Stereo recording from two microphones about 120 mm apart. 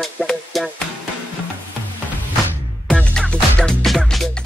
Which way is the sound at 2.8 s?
10° left (ahead or behind).